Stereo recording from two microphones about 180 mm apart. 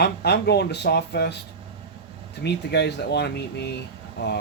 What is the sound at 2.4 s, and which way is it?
Speech, 70° left (ahead or behind).